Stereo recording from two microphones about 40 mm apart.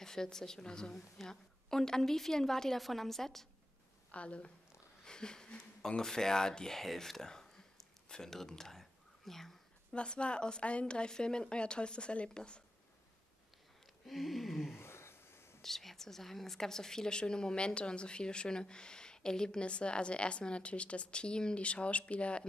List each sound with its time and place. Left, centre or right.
0.0 s a woman's voice: centre
4.1 s speech: left
5.0 s speech: centre
9.9 s a woman's voice: left
14.0 s a sound: centre
14.8 s a sound: left
15.6 s a woman's voice: centre; by 22.5 s left